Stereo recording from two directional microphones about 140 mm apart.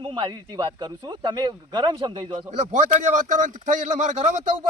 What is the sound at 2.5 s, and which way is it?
A man's voice, 60° right (ahead or behind).